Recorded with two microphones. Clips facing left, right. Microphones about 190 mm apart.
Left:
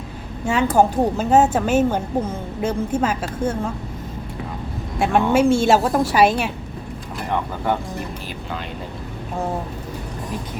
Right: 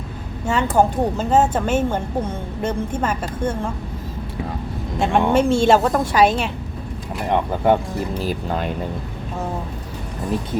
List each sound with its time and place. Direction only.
0.4 s speech: 10° left (ahead or behind)
4.9 s speech: 5° left (ahead or behind)
7.3 s speech: 20° right (ahead or behind)
8.3 s speech: 45° right (ahead or behind)